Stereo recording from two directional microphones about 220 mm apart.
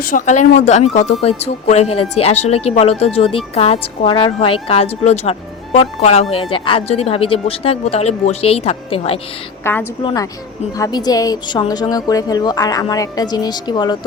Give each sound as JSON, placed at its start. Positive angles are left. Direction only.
{"t": 0.0, "sound": "speech", "side_deg": 40}
{"t": 9.7, "sound": "a woman's voice", "side_deg": 10}
{"t": 10.0, "sound": "a woman's voice", "side_deg": 20}